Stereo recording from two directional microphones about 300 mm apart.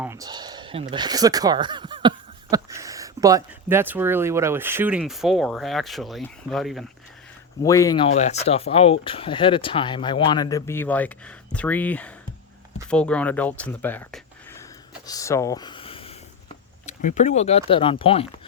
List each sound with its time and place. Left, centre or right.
0.0 s speech: centre
7.6 s speech: centre
15.0 s a sound: centre
18.0 s speech: centre